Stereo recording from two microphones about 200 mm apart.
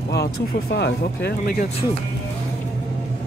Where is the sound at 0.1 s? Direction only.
55° left (ahead or behind).